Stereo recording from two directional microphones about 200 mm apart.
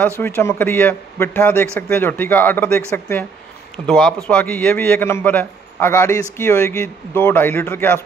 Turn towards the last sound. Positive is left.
turn(degrees=10)  # may be behind; listen again after turning